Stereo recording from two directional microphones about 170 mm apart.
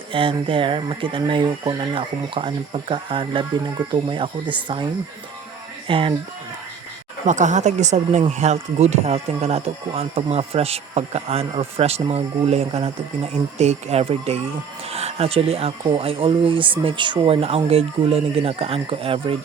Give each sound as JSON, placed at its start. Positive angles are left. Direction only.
{"t": 0.1, "sound": "speech", "side_deg": -30}
{"t": 5.9, "sound": "speech", "side_deg": -30}
{"t": 7.3, "sound": "speech", "side_deg": -45}